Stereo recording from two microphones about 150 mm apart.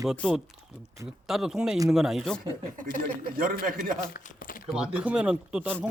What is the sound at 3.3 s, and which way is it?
Speech, 65° right (ahead or behind).